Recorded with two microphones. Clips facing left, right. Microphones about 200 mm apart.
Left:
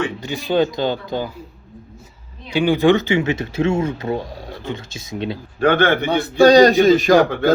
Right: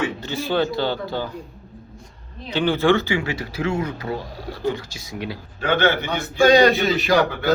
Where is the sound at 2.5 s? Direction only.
15° left (ahead or behind).